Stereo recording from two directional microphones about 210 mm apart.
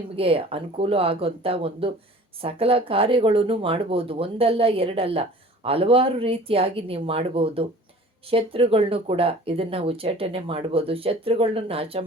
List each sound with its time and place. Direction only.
0.2 s speech: 25° right (ahead or behind)